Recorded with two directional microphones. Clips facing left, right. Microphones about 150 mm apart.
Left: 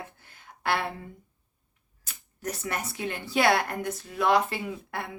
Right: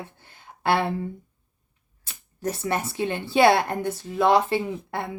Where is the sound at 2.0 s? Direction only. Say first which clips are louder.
Right 6 dB; 30° right (ahead or behind).